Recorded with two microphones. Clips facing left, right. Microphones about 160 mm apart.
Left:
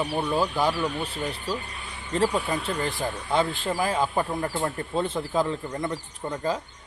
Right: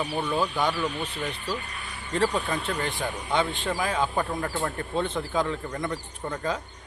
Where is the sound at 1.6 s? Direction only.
25° left (ahead or behind).